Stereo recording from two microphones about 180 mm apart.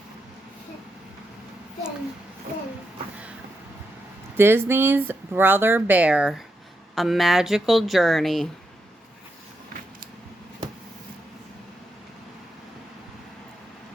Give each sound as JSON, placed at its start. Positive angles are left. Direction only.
{"t": 4.4, "sound": "speech", "side_deg": -15}